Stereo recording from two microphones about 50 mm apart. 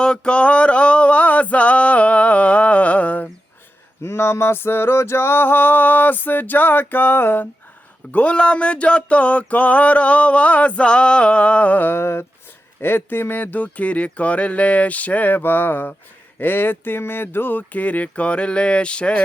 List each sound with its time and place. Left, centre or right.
0.0 s male singing: centre
4.0 s male singing: left
8.1 s a sound: left
11.9 s male singing: left
12.8 s speech: left